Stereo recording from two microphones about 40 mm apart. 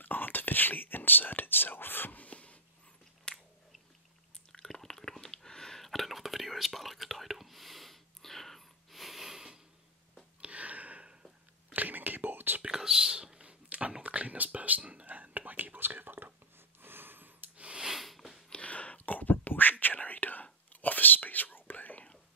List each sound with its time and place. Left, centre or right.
0.0 s speech: left
2.1 s a sound: left
3.3 s biting: centre
4.5 s drip: centre
5.8 s whispering: centre
10.4 s a sound: right
11.7 s whispering: right
12.6 s whispering: centre
13.4 s whispering: right
16.8 s snort: right
17.7 s sniff: centre
18.5 s a sound: left
19.0 s whispering: left